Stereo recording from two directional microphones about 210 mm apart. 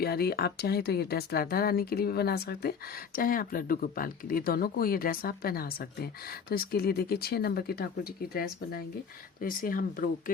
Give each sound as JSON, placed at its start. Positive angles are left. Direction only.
{"t": 0.0, "sound": "speech", "side_deg": 50}